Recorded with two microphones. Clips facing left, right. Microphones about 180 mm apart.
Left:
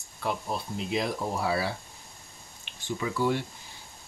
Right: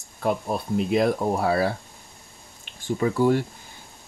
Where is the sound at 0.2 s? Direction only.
50° right (ahead or behind).